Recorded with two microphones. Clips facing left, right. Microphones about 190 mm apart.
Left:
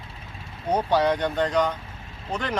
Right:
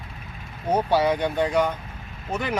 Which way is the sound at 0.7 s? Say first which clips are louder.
Right 1 dB; 10° right (ahead or behind).